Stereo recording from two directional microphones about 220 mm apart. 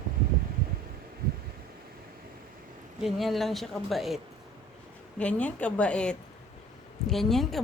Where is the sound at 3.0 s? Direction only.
Centre (ahead or behind).